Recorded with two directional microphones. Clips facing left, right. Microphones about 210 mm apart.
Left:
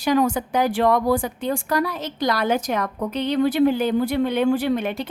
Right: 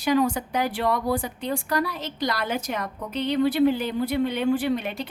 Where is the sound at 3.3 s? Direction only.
45° left (ahead or behind).